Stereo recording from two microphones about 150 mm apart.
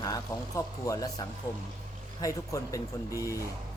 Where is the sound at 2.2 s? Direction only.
20° left (ahead or behind).